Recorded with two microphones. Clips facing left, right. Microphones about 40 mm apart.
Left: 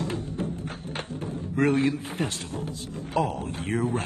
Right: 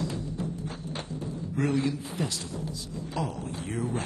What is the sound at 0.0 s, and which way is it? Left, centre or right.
Music, left.